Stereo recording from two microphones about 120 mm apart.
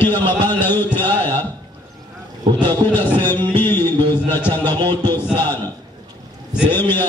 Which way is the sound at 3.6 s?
15° left (ahead or behind).